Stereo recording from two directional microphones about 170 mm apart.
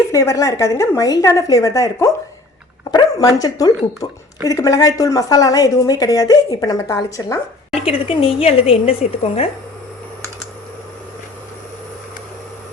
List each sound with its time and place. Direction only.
0.1 s a woman's voice: 15° left (ahead or behind)
7.8 s a woman's voice: 35° left (ahead or behind)